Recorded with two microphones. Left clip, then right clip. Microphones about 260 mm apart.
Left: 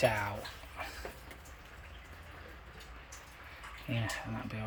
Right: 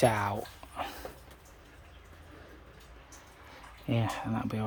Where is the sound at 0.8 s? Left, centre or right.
Right.